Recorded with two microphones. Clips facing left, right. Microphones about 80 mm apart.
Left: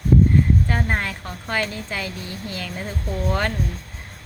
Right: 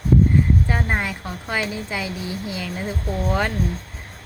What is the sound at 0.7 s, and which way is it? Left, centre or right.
A woman's voice, centre.